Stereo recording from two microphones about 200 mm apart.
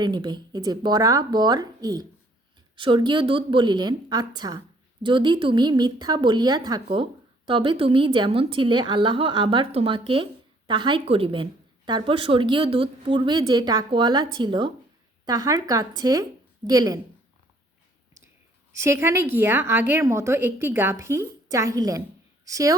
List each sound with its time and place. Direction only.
0.0 s a woman's voice: 20° right (ahead or behind)
18.8 s a woman's voice: 10° right (ahead or behind)